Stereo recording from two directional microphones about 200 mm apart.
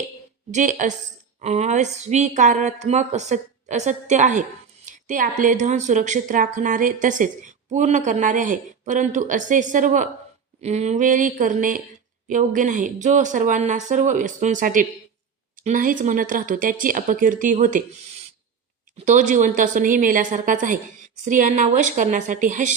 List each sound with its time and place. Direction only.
0.5 s speech: 40° right (ahead or behind)
18.9 s speech: 35° right (ahead or behind)